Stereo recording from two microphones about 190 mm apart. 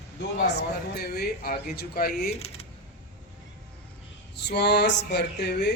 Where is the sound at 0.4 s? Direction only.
55° left (ahead or behind).